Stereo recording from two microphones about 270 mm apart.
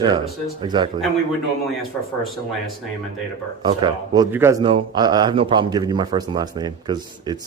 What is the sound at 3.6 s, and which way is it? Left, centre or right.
Speech, centre.